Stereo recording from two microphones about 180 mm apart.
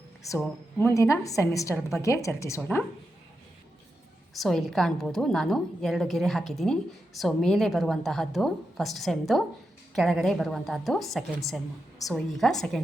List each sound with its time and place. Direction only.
0.3 s a woman's voice: 10° left (ahead or behind)
4.4 s a woman's voice: centre (ahead or behind)